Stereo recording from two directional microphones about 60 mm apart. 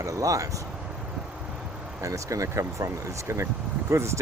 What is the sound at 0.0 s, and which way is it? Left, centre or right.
Speech, right.